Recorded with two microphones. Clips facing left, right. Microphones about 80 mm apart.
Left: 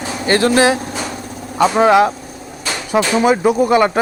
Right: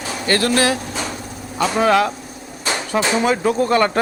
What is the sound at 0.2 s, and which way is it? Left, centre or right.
Speech, left.